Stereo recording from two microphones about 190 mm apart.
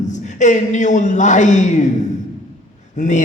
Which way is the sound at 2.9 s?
40° left (ahead or behind).